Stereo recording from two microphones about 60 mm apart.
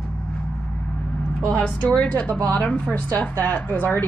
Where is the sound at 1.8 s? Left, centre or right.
Left.